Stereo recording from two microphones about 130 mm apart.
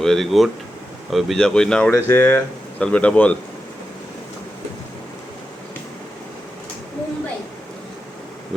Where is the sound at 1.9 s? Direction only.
15° left (ahead or behind).